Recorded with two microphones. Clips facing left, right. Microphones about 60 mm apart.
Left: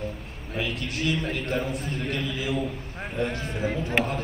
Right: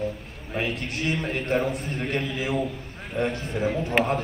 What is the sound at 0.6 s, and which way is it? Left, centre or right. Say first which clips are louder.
A man's voice: right 1 dB; right.